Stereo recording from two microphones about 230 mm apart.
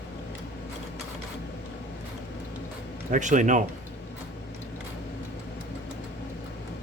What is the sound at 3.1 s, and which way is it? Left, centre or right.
Speech, right.